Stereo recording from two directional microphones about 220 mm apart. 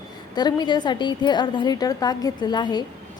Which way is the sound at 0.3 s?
20° left (ahead or behind).